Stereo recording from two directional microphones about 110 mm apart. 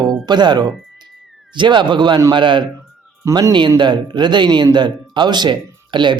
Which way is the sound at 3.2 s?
25° right (ahead or behind).